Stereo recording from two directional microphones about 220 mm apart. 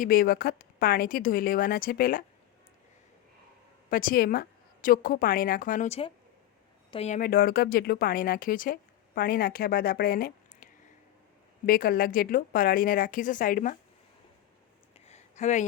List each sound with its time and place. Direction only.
0.0 s speech: 40° left (ahead or behind)
3.8 s speech: 40° left (ahead or behind)
15.0 s a sound: 30° left (ahead or behind)